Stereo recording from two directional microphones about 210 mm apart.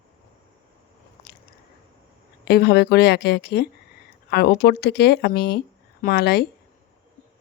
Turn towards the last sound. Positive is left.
turn(degrees=50)  # may be behind; listen again after turning